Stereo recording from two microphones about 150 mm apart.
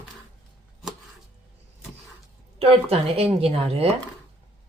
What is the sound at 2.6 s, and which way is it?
A woman's voice, 40° right (ahead or behind).